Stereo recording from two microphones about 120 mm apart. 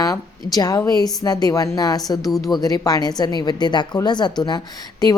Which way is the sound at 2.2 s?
Centre (ahead or behind).